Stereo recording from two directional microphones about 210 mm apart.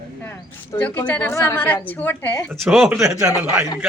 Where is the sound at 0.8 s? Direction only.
5° left (ahead or behind).